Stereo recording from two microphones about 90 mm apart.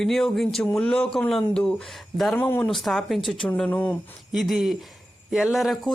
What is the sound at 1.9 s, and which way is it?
Speech, centre (ahead or behind).